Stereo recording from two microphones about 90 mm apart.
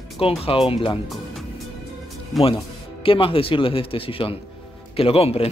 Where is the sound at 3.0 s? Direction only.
85° left.